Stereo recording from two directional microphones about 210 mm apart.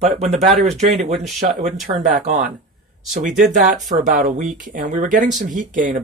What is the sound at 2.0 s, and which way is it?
Speech, 35° right (ahead or behind).